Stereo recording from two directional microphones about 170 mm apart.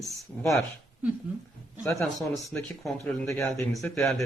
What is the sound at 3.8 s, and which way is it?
Speech, 5° left (ahead or behind).